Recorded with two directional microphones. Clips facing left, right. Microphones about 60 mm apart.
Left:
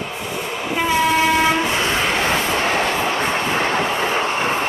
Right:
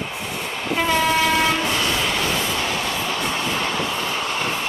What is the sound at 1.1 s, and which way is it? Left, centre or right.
Train, left.